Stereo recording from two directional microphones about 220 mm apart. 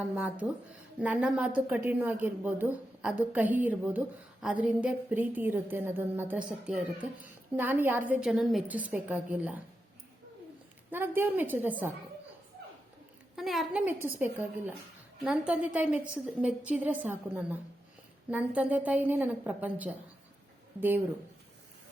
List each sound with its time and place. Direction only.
0.0 s a woman's voice: 5° right (ahead or behind)
10.9 s a woman's voice: 10° right (ahead or behind)
13.3 s a woman's voice: centre (ahead or behind)